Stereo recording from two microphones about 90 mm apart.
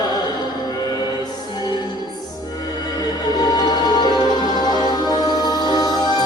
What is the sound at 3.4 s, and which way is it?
Music, 45° left (ahead or behind).